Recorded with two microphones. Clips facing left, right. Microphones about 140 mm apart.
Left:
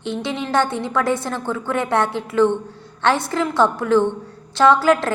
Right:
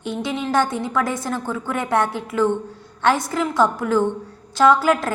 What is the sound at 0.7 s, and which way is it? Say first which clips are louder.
A woman's voice: left 2 dB; 25° left (ahead or behind).